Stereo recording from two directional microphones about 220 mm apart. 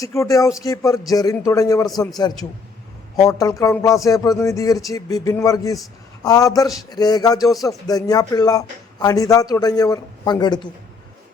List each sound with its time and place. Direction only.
0.0 s speech: 15° left (ahead or behind)
3.2 s speech: 15° left (ahead or behind)